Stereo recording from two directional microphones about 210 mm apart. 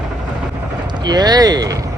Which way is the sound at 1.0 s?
20° right (ahead or behind).